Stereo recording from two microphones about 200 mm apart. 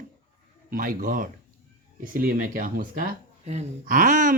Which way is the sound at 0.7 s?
45° right (ahead or behind).